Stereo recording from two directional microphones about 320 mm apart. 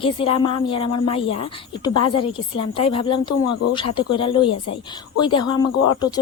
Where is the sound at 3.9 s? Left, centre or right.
Centre.